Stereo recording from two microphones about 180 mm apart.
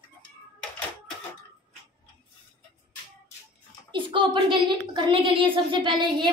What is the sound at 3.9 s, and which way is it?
A woman's voice, 30° right (ahead or behind).